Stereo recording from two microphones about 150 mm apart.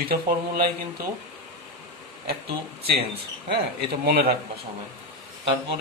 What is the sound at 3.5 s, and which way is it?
Speech, 85° right.